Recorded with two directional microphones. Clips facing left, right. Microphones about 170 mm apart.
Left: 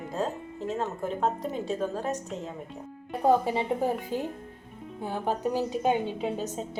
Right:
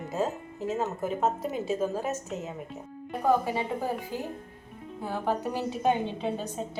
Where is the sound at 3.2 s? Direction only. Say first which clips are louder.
Left 2 dB; 25° left (ahead or behind).